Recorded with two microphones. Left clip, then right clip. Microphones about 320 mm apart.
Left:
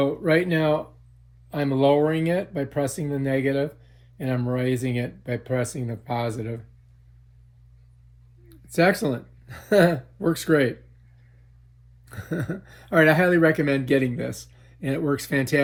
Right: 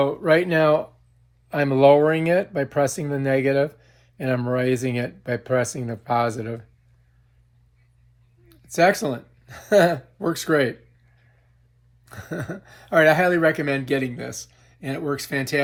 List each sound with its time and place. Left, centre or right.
0.0 s speech: centre
8.4 s speech: centre
12.0 s speech: centre